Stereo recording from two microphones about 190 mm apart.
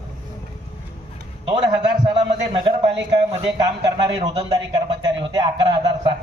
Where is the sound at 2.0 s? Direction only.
25° right (ahead or behind).